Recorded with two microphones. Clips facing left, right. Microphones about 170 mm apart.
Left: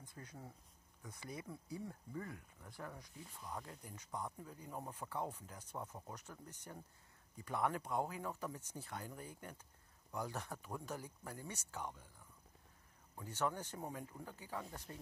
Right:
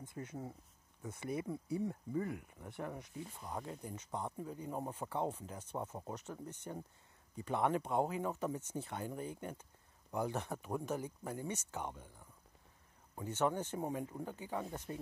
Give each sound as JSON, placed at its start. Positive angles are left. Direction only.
{"t": 0.0, "sound": "a sound", "side_deg": -25}
{"t": 1.0, "sound": "speech", "side_deg": -25}
{"t": 1.3, "sound": "speech", "side_deg": -55}
{"t": 1.7, "sound": "speech", "side_deg": -20}
{"t": 13.2, "sound": "speech", "side_deg": -25}